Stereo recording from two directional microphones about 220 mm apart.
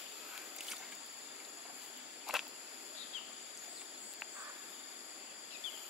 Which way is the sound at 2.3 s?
Centre (ahead or behind).